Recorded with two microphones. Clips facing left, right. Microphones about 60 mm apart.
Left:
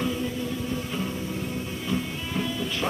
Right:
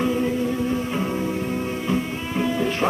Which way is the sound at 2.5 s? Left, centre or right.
Right.